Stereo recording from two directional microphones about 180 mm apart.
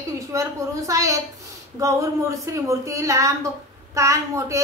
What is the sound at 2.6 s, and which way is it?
A woman's voice, 15° right (ahead or behind).